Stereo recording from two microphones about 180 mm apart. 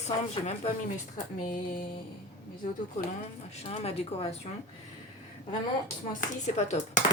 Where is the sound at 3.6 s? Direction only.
35° left (ahead or behind).